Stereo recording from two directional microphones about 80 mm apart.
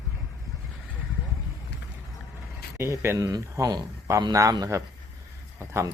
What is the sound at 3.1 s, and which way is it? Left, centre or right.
Speech, right.